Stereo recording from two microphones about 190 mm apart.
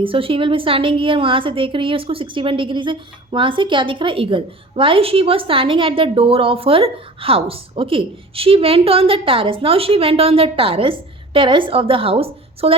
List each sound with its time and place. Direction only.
0.0 s a woman's voice: 30° right (ahead or behind)